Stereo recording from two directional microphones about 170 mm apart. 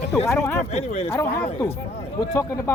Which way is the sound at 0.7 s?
35° left (ahead or behind).